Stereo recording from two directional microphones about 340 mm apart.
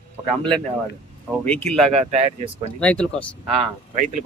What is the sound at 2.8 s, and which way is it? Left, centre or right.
Speech, centre.